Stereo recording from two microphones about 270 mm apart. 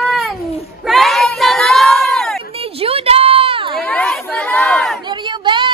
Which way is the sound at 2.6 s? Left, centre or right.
Right.